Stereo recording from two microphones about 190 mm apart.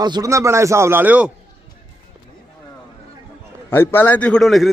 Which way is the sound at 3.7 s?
10° left (ahead or behind).